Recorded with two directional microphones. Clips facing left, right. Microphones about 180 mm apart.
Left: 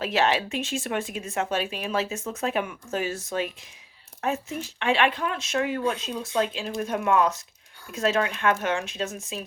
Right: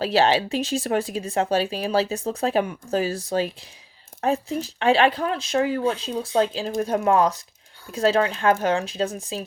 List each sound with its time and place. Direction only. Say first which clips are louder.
0.0 s speech: right 4 dB; 35° right (ahead or behind)